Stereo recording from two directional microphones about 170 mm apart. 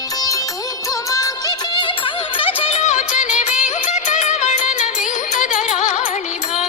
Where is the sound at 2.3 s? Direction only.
30° left (ahead or behind).